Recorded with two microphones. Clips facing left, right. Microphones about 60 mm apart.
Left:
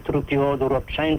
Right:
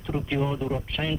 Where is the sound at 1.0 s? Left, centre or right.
Left.